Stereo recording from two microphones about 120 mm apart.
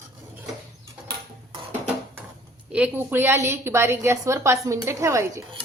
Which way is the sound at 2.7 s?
10° right (ahead or behind).